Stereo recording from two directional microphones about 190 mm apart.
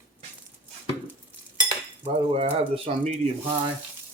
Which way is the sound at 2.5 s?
30° right (ahead or behind).